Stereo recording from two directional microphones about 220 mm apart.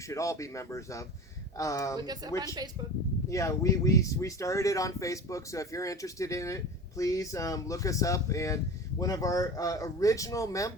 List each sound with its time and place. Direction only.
0.1 s speech: 15° left (ahead or behind)
2.0 s speech: 20° right (ahead or behind)
3.2 s speech: 15° left (ahead or behind)